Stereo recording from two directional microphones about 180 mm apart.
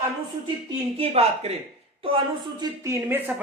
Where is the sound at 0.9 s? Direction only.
35° right (ahead or behind).